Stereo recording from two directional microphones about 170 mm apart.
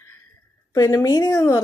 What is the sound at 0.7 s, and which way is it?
Speech, 20° left (ahead or behind).